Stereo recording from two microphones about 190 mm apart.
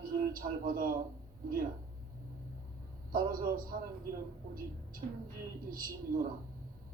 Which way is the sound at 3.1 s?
45° right (ahead or behind).